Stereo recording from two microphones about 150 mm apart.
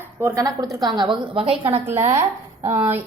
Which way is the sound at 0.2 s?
20° right (ahead or behind).